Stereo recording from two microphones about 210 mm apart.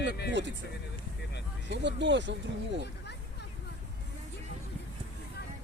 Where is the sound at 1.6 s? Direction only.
55° right (ahead or behind).